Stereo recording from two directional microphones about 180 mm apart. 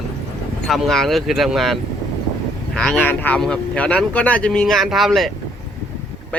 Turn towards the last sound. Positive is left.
turn(degrees=0)  # may be behind; listen again after turning